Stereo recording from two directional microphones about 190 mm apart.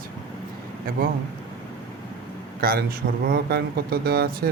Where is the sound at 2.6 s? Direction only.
50° right (ahead or behind).